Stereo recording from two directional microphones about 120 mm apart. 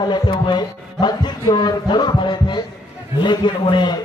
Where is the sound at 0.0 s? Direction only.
35° left (ahead or behind).